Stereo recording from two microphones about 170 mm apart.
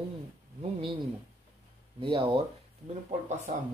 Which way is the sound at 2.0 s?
30° right (ahead or behind).